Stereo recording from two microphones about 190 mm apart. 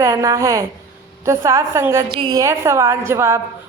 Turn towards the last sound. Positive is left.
turn(degrees=-15)  # may be behind; listen again after turning